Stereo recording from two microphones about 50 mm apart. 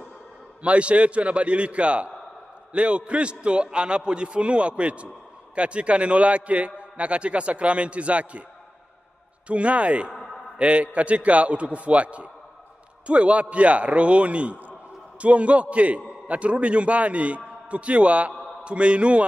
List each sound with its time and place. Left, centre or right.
0.6 s a man's voice: right
9.5 s a man's voice: right